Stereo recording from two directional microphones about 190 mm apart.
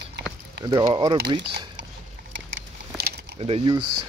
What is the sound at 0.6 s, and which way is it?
Speech, 20° right (ahead or behind).